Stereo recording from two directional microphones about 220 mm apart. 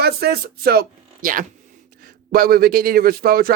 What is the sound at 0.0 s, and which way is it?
Speech, 45° right (ahead or behind).